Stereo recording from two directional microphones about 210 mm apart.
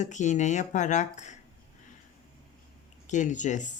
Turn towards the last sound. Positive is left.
turn(degrees=35)  # may be behind; listen again after turning